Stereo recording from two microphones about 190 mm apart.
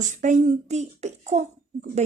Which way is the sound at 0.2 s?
40° right (ahead or behind).